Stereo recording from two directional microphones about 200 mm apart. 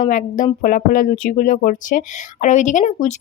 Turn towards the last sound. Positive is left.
turn(degrees=40)  # may be behind; listen again after turning